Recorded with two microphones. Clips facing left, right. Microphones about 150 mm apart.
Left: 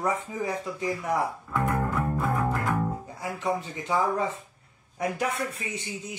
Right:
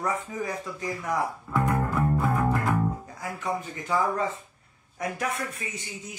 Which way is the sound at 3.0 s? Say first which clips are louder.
Left 2 dB; 20° left (ahead or behind).